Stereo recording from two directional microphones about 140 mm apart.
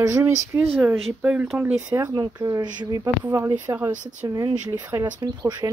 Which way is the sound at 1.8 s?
25° right (ahead or behind).